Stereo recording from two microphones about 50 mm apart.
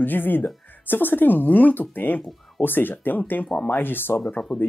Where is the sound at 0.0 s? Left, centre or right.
Left.